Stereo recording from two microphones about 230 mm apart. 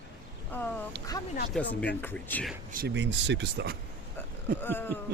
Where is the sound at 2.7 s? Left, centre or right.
Right.